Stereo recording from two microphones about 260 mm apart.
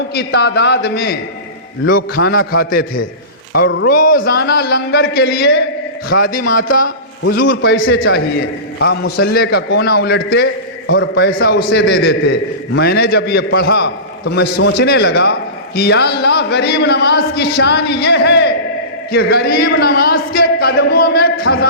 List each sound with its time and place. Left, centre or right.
0.1 s a man's voice: left
7.3 s a man's voice: left